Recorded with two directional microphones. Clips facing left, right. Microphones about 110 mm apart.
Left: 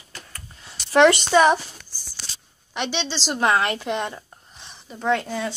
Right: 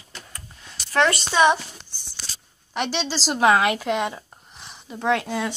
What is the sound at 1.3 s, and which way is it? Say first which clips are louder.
Speech: left 2 dB; centre (ahead or behind).